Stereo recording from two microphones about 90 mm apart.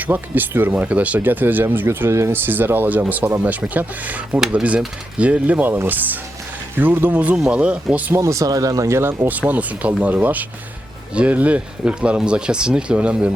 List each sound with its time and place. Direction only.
0.0 s speech: 20° right (ahead or behind)
4.4 s speech: 5° right (ahead or behind)
8.1 s speech: 35° right (ahead or behind); by 13.3 s 15° right (ahead or behind)